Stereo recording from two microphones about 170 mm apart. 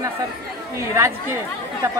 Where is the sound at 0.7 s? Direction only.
15° right (ahead or behind).